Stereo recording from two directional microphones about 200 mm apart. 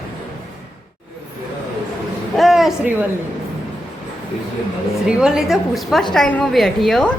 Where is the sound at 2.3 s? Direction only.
Centre (ahead or behind).